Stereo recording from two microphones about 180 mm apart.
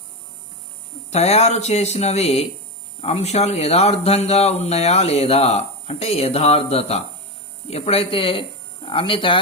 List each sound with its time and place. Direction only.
1.1 s speech: 35° left (ahead or behind)